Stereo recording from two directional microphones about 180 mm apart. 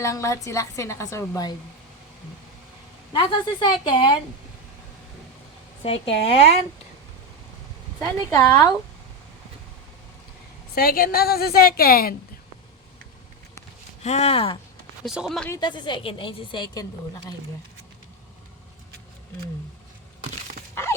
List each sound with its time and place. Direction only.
0.0 s a woman's voice: 15° left (ahead or behind)
3.1 s a woman's voice: 30° left (ahead or behind)
5.8 s a woman's voice: 35° left (ahead or behind)
8.3 s a woman's voice: 15° left (ahead or behind)
10.8 s a woman's voice: 55° left (ahead or behind)
14.0 s a woman's voice: 35° left (ahead or behind)
15.0 s speech: centre (ahead or behind)
15.4 s a woman's voice: 20° left (ahead or behind)